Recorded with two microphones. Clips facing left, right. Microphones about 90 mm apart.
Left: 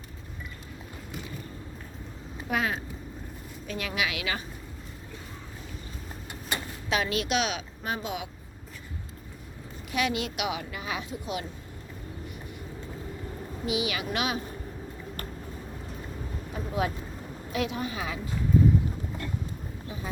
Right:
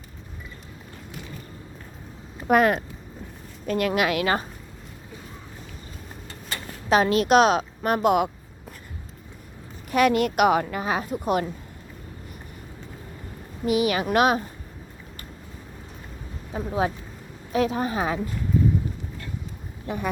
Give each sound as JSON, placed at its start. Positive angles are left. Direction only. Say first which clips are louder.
{"t": 2.5, "sound": "a woman's voice", "louder": "right 10 dB", "side_deg": -55}
{"t": 6.5, "sound": "vehicle", "louder": "left 2 dB", "side_deg": 20}
{"t": 6.8, "sound": "speech", "louder": "right 9 dB", "side_deg": -40}
{"t": 7.8, "sound": "speech", "louder": "right 13 dB", "side_deg": -60}
{"t": 9.9, "sound": "a woman's voice", "louder": "right 9 dB", "side_deg": -50}
{"t": 13.7, "sound": "a woman's voice", "louder": "right 8 dB", "side_deg": -45}
{"t": 16.5, "sound": "speech", "louder": "right 5 dB", "side_deg": -35}
{"t": 19.9, "sound": "speech", "louder": "right 11 dB", "side_deg": -65}